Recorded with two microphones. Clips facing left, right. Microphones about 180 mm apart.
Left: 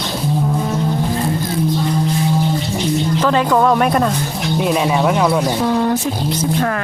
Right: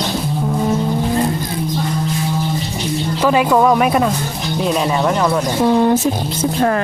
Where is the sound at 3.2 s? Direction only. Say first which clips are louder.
Right 3 dB; 10° right (ahead or behind); by 5.4 s 5° left (ahead or behind).